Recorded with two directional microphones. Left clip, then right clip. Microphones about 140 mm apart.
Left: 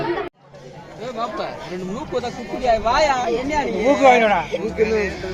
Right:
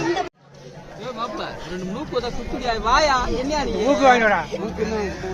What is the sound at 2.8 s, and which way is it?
Speech, 30° right (ahead or behind).